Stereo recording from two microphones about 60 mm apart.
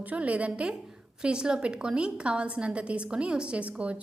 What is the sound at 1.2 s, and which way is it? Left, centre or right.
A woman's voice, centre.